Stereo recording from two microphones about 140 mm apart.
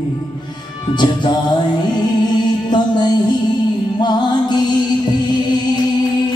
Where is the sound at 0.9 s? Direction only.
30° left (ahead or behind).